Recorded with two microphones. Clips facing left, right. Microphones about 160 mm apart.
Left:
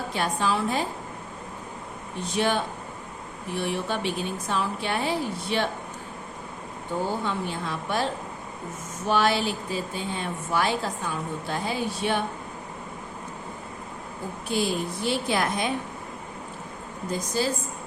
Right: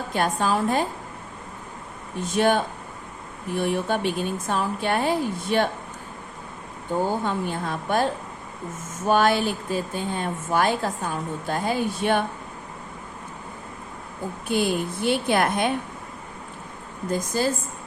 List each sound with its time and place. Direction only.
0.1 s speech: 50° right (ahead or behind)
2.2 s speech: 50° right (ahead or behind)
7.3 s speech: 50° right (ahead or behind)
14.4 s a woman's voice: 55° right (ahead or behind)
17.1 s speech: 50° right (ahead or behind)